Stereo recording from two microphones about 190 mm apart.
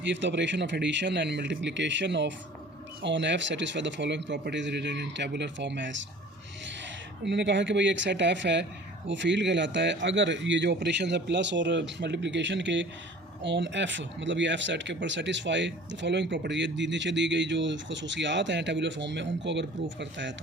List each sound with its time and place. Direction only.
0.0 s speech: 70° right (ahead or behind)
7.3 s speech: 70° right (ahead or behind)